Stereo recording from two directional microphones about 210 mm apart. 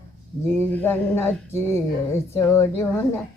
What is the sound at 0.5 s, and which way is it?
Speech, 10° left (ahead or behind).